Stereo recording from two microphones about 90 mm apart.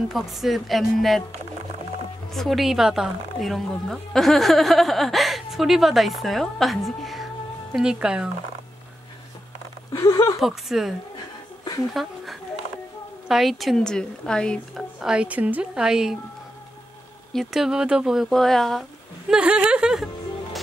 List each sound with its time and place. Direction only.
0.1 s a woman's voice: 5° right (ahead or behind)
2.3 s a woman's voice: centre (ahead or behind)
9.9 s speech: 35° left (ahead or behind)
10.4 s a woman's voice: 5° right (ahead or behind)
11.9 s a sound: centre (ahead or behind)
13.3 s a woman's voice: centre (ahead or behind)
15.0 s a woman's voice: 10° right (ahead or behind)
17.3 s a woman's voice: centre (ahead or behind)